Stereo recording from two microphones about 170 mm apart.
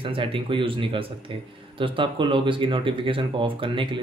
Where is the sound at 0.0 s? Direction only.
30° right (ahead or behind).